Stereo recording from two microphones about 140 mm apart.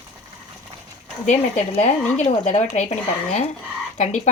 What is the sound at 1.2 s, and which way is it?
Speech, 55° left (ahead or behind).